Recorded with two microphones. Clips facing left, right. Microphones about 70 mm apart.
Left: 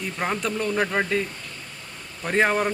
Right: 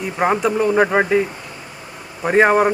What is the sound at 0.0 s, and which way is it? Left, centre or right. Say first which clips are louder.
Speech: right 9 dB; centre.